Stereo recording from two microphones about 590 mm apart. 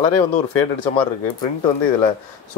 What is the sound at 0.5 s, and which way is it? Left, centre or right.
Speech, left.